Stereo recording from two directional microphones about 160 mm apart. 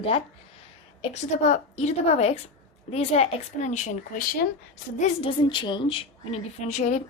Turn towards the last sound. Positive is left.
turn(degrees=45)  # may be behind; listen again after turning